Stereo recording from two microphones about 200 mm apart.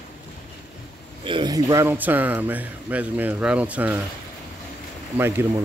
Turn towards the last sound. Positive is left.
turn(degrees=-10)  # may be behind; listen again after turning